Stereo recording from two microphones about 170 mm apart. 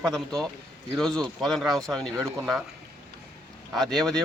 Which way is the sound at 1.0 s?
5° left (ahead or behind).